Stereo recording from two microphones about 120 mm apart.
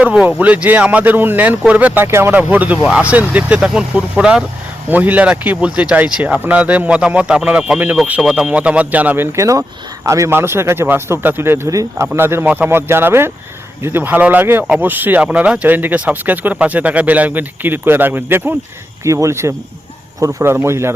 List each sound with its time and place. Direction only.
0.0 s speech: 10° right (ahead or behind)